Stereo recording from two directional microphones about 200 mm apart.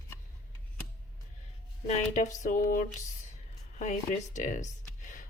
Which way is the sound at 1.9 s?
35° left (ahead or behind).